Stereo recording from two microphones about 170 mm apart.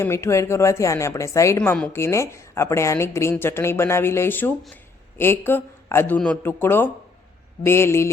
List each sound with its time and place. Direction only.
0.0 s a woman's voice: 15° left (ahead or behind)